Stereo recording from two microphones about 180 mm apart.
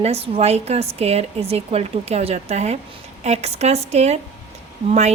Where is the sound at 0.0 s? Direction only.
35° right (ahead or behind).